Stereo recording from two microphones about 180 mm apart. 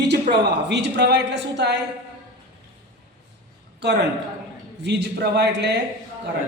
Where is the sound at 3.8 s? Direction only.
70° right (ahead or behind).